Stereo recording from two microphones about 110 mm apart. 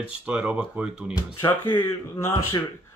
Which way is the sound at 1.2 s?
40° left (ahead or behind).